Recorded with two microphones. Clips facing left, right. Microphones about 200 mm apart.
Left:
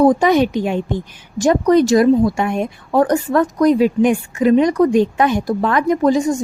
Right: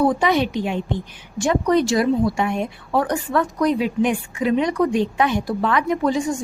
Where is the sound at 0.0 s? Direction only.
40° left (ahead or behind).